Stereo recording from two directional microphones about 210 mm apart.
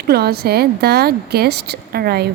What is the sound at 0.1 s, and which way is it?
A woman's voice, 50° right (ahead or behind).